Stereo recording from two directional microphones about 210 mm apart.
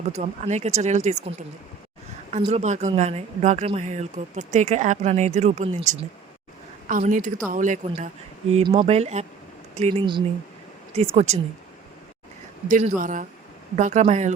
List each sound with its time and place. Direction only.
0.1 s speech: 35° right (ahead or behind)
2.5 s speech: 30° right (ahead or behind)
8.5 s speech: 25° right (ahead or behind)
12.6 s speech: 40° right (ahead or behind)